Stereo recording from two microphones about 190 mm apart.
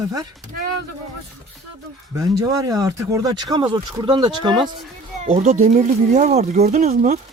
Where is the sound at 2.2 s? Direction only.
20° right (ahead or behind).